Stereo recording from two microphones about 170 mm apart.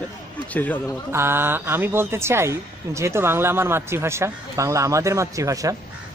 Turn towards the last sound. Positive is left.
turn(degrees=-20)  # may be behind; listen again after turning